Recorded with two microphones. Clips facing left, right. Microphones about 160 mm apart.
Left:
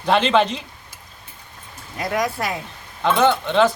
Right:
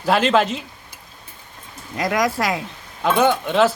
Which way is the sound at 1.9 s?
90° right.